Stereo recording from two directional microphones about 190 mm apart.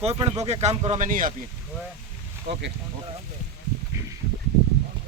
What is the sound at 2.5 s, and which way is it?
Speech, 65° right (ahead or behind).